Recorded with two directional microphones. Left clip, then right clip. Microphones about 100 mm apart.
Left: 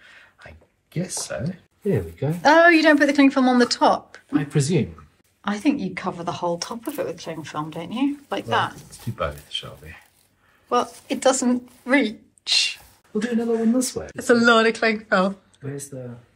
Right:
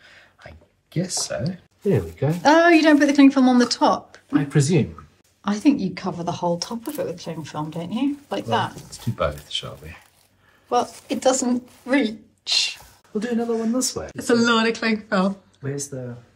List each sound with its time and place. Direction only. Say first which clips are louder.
0.1 s a sound: right 1 dB; 5° right (ahead or behind)
2.4 s speech: left 1 dB; 25° right (ahead or behind)
4.3 s speech: right 2 dB; centre (ahead or behind)
5.4 s speech: right 3 dB; 30° right (ahead or behind)
9.0 s speech: right 3 dB; 5° right (ahead or behind)
10.7 s speech: even; 20° right (ahead or behind)
15.9 s speech: right 2 dB; 5° right (ahead or behind)